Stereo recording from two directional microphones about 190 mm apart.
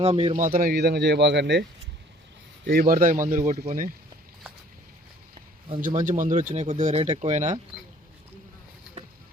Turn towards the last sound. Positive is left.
turn(degrees=-40)  # may be behind; listen again after turning